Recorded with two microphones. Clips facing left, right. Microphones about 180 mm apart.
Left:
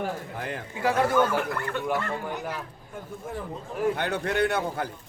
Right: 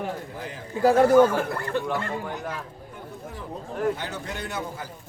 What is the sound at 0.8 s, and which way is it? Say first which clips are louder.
Speech: right 7 dB; 40° right (ahead or behind).